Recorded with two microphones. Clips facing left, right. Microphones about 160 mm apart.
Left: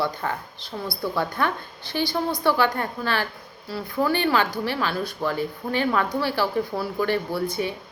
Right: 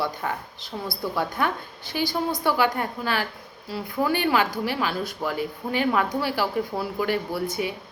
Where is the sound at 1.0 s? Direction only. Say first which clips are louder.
Left 1 dB; 10° right (ahead or behind).